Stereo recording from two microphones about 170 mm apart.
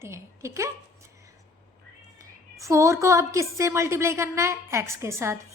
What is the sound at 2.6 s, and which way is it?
A woman's voice, 15° right (ahead or behind).